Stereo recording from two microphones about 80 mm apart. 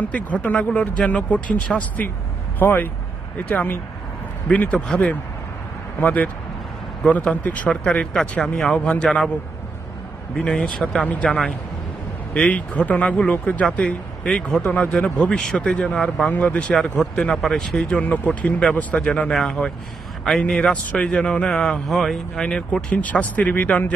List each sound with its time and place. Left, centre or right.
0.1 s speech: centre
2.6 s speech: left
10.4 s speech: centre
12.4 s speech: centre